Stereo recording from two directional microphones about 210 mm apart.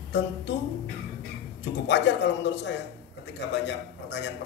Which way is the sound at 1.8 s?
55° left (ahead or behind).